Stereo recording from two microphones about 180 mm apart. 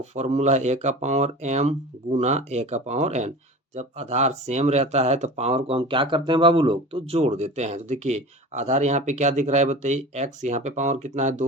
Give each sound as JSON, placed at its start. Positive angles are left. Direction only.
{"t": 0.0, "sound": "speech", "side_deg": -40}